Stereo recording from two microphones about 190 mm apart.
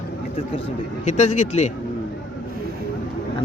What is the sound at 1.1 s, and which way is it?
Speech, 40° left (ahead or behind).